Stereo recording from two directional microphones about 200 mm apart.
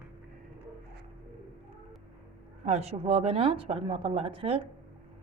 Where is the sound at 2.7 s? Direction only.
30° right (ahead or behind).